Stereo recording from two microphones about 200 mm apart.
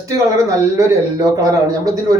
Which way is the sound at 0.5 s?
15° right (ahead or behind).